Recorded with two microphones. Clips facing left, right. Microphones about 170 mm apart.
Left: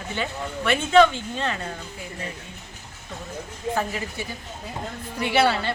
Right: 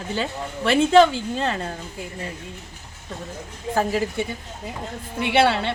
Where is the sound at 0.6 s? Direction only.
35° right (ahead or behind).